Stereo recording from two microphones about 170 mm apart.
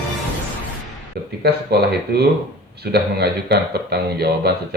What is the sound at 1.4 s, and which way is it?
A man's voice, 70° right (ahead or behind).